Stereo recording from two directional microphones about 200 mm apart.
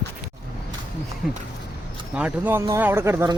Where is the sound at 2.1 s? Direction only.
5° right (ahead or behind).